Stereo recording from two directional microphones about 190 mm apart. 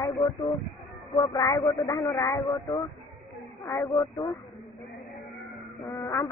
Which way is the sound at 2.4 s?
Centre (ahead or behind).